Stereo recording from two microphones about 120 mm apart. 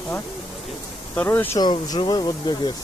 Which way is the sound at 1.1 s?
15° left (ahead or behind).